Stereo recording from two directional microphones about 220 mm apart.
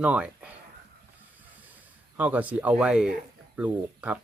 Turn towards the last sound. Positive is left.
turn(degrees=-5)  # may be behind; listen again after turning